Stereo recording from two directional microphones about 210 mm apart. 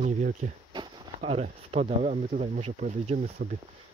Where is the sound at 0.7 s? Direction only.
30° right (ahead or behind).